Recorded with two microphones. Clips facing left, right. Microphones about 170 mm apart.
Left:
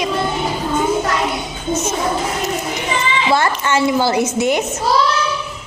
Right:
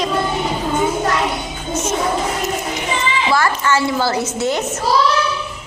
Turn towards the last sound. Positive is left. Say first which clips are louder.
# left 3 dB
turn(degrees=15)  # may be behind; listen again after turning